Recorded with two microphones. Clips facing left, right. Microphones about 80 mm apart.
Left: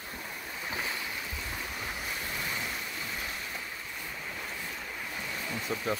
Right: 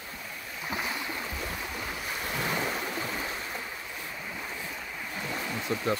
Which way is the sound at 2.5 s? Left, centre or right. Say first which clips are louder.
Right 6 dB; right.